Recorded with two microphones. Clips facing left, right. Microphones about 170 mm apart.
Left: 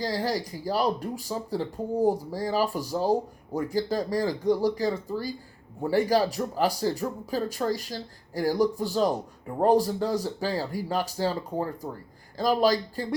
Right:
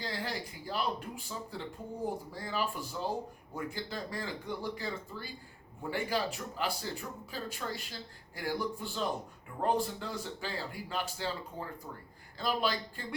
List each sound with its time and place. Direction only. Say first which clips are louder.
0.0 s speech: left 10 dB; 40° left (ahead or behind)